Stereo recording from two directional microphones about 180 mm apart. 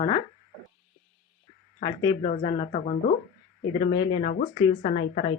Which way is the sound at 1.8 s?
25° left (ahead or behind).